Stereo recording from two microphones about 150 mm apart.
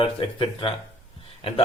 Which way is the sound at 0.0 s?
35° left (ahead or behind).